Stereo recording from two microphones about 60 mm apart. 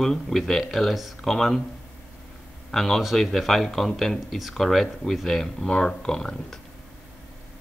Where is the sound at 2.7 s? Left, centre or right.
Centre.